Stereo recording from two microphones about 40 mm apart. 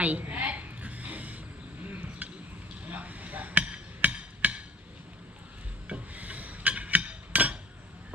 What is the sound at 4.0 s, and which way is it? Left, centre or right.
Hammer, right.